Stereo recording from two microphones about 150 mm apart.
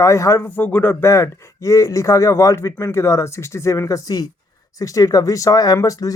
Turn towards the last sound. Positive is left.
turn(degrees=20)  # may be behind; listen again after turning